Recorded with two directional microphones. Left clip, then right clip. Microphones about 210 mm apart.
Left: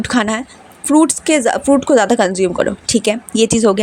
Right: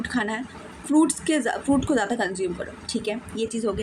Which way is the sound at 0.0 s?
45° left (ahead or behind).